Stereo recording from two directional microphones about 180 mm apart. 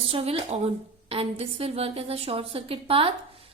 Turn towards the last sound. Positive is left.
turn(degrees=-30)  # may be behind; listen again after turning